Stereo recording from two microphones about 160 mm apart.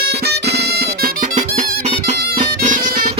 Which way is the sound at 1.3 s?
50° right (ahead or behind).